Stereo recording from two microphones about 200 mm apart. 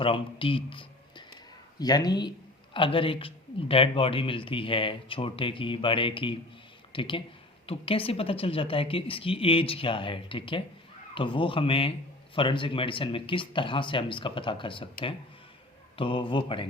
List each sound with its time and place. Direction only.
0.0 s speech: 25° left (ahead or behind)
16.0 s speech: 25° left (ahead or behind)